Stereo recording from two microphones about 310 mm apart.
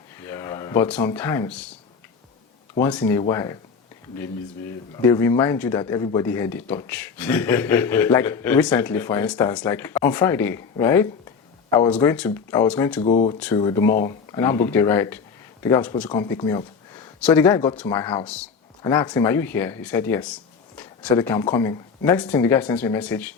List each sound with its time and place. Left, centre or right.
0.2 s speech: centre
2.8 s speech: centre
5.0 s speech: centre
13.0 s speech: centre